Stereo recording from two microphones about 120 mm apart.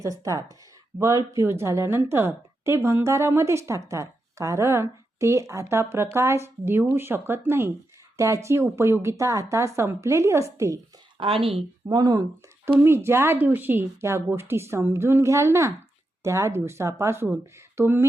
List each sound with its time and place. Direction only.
0.0 s a woman's voice: 30° right (ahead or behind)
11.2 s speech: 50° right (ahead or behind)
11.9 s speech: 35° right (ahead or behind)
12.8 s a woman's voice: 20° right (ahead or behind)